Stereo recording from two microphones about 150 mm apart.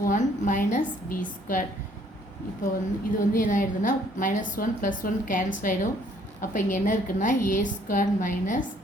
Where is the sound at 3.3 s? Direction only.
60° left (ahead or behind).